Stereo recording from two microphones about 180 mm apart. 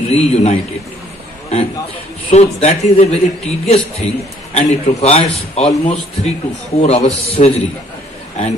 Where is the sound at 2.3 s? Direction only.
40° left (ahead or behind).